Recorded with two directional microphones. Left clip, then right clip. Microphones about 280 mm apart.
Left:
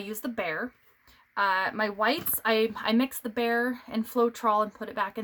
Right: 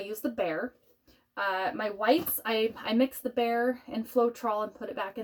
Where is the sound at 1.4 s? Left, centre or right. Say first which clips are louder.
Left 4 dB; left.